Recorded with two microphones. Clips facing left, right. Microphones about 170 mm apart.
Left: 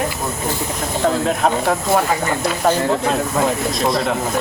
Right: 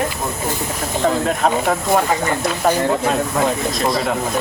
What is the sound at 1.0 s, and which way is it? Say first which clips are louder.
Speech: even; centre (ahead or behind).